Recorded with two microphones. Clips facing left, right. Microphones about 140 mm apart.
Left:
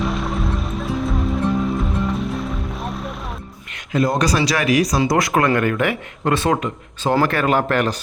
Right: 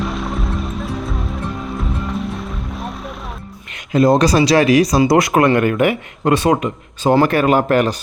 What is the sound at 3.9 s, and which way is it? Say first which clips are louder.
Speech: right 6 dB; 30° right (ahead or behind).